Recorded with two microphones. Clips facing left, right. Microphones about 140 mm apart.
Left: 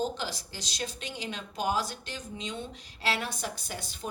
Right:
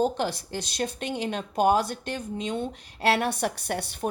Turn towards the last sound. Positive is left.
turn(degrees=-65)  # may be behind; listen again after turning